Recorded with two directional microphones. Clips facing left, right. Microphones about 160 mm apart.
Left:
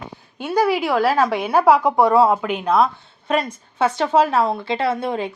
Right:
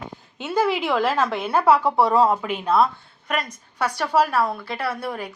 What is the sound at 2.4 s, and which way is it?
Speech, centre (ahead or behind).